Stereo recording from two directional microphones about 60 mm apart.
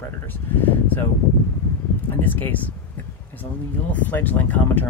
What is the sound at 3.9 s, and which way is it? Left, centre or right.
Speech, left.